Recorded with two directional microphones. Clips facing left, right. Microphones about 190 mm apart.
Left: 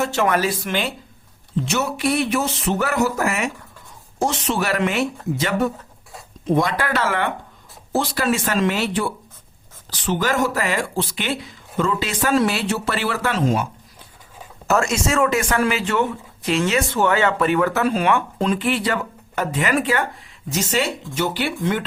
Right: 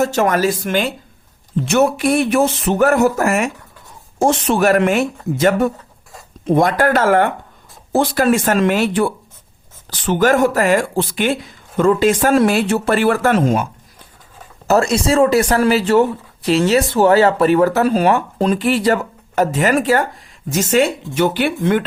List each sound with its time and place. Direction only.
0.0 s speech: 40° right (ahead or behind)
14.7 s speech: 35° right (ahead or behind); by 21.8 s 55° right (ahead or behind)